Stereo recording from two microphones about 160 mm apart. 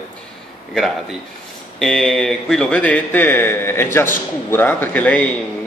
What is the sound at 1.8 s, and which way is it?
Speech, 5° left (ahead or behind).